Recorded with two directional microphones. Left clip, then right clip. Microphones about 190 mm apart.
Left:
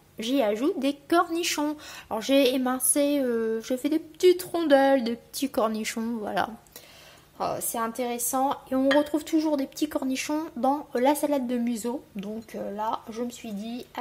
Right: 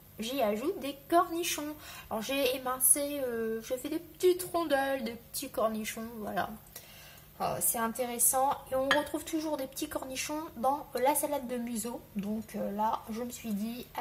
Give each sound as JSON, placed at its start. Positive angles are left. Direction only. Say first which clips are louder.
{"t": 0.2, "sound": "a woman's voice", "louder": "left 6 dB", "side_deg": 45}